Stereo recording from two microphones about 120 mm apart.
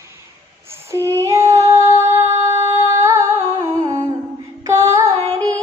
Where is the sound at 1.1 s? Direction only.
25° right (ahead or behind).